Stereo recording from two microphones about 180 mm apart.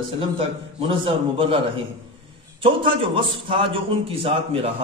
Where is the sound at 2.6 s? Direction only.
30° right (ahead or behind).